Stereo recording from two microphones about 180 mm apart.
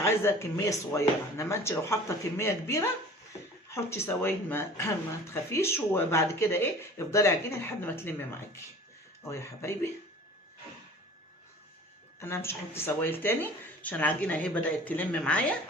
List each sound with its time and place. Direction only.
0.0 s speech: 15° left (ahead or behind)
12.2 s speech: 15° left (ahead or behind)